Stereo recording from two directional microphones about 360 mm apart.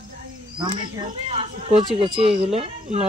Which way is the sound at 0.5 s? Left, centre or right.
Centre.